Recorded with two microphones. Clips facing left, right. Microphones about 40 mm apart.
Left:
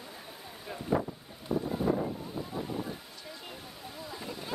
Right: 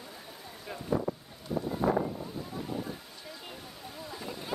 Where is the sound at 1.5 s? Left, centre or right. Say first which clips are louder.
Left 2 dB; left.